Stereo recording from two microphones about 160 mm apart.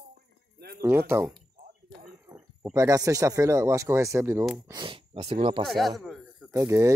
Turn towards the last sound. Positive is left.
turn(degrees=-20)  # may be behind; listen again after turning